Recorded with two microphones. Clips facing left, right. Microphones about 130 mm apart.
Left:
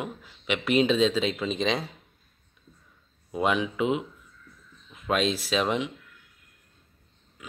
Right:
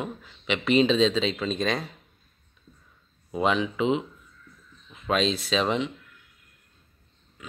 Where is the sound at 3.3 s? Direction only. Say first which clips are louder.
Right 1 dB; 5° left (ahead or behind).